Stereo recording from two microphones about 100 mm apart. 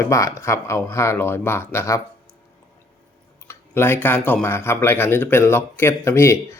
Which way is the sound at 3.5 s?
25° left (ahead or behind).